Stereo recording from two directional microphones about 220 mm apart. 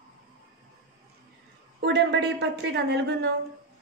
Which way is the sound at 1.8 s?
55° right (ahead or behind).